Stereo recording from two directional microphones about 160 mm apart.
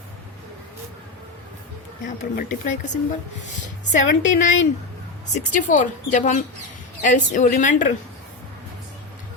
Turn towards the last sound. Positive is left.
turn(degrees=50)  # may be behind; listen again after turning